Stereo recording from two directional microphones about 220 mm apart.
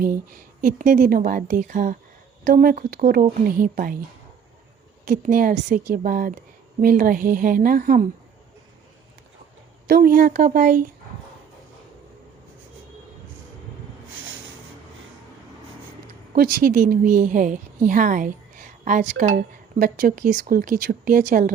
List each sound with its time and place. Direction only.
0.0 s speech: 40° right (ahead or behind)
5.0 s speech: 40° right (ahead or behind)
9.8 s speech: 40° right (ahead or behind)
16.3 s a woman's voice: 40° right (ahead or behind)